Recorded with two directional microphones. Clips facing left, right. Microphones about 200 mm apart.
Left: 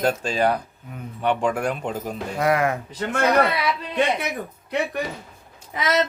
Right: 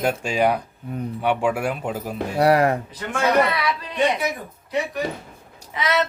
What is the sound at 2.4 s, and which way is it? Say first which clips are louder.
Speech: right 4 dB; 35° right (ahead or behind).